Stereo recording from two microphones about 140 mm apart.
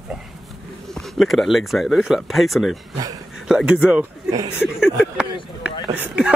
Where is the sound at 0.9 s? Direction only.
Centre (ahead or behind).